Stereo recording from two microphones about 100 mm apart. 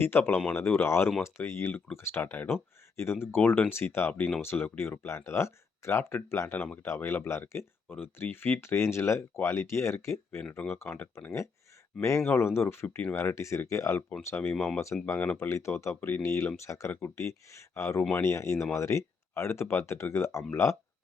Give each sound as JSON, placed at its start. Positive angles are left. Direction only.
{"t": 0.0, "sound": "speech", "side_deg": 20}
{"t": 10.8, "sound": "speech", "side_deg": 15}
{"t": 11.9, "sound": "speech", "side_deg": 30}
{"t": 14.5, "sound": "speech", "side_deg": 5}
{"t": 15.0, "sound": "speech", "side_deg": 20}